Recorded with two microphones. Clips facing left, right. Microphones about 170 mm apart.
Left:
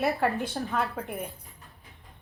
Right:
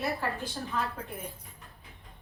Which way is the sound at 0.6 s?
50° left (ahead or behind).